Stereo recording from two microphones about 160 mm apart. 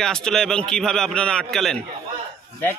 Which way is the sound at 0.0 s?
5° left (ahead or behind).